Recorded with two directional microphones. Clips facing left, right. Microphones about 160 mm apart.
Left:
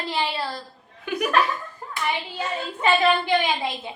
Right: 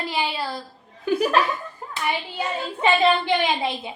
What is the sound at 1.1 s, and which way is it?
Speech, 30° right (ahead or behind).